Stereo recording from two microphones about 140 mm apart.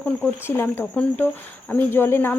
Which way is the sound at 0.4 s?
15° left (ahead or behind).